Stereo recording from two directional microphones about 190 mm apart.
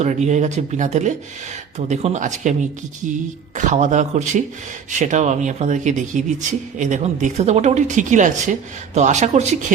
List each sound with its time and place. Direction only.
0.0 s speech: 35° right (ahead or behind)